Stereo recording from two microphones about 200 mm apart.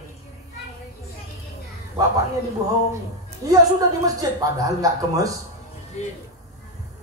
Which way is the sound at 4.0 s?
15° right (ahead or behind).